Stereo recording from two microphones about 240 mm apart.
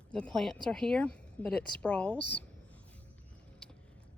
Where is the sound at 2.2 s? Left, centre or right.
Left.